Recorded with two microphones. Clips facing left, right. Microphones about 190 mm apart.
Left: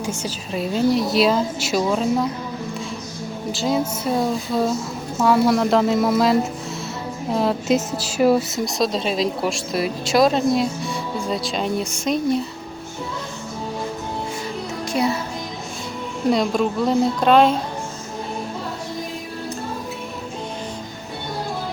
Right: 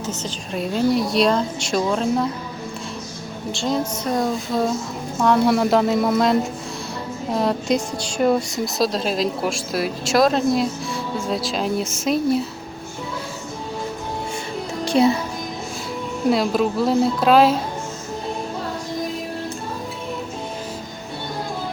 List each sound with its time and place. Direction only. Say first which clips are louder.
0.0 s a woman's voice: left 1 dB; 10° left (ahead or behind)
3.5 s a woman's voice: left 1 dB; 5° left (ahead or behind)
14.8 s music: right 5 dB; 25° right (ahead or behind)
16.3 s a woman's voice: even; 5° right (ahead or behind)